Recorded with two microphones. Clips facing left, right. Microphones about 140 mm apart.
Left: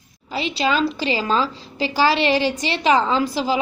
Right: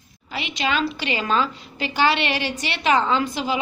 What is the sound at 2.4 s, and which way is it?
Speech, 15° left (ahead or behind).